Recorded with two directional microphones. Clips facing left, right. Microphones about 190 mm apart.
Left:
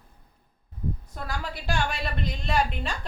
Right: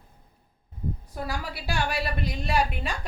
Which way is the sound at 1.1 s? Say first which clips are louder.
Right 2 dB; 10° right (ahead or behind).